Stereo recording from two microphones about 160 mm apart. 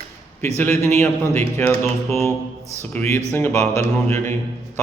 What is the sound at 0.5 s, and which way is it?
Speech, 15° left (ahead or behind).